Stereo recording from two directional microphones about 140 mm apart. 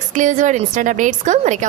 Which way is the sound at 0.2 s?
60° right (ahead or behind).